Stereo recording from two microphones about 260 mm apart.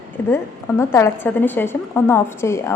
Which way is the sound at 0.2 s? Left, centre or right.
Centre.